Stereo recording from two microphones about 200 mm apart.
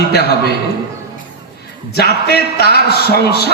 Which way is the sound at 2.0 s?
55° left (ahead or behind).